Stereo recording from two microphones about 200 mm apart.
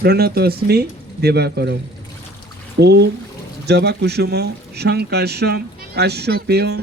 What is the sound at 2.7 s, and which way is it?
Speech, 55° right (ahead or behind).